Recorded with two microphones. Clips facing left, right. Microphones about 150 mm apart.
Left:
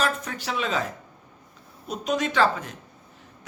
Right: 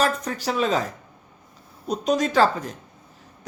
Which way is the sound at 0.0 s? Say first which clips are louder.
Right 4 dB; 40° right (ahead or behind).